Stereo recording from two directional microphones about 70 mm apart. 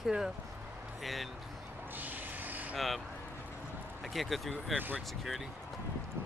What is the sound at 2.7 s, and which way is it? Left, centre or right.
Speech, centre.